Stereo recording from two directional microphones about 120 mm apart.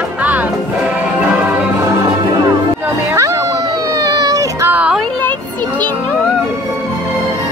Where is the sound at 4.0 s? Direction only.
30° right (ahead or behind).